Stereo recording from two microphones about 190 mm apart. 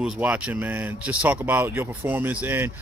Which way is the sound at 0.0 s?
5° right (ahead or behind).